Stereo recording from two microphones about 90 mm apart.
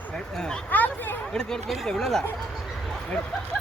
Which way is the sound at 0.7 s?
20° left (ahead or behind).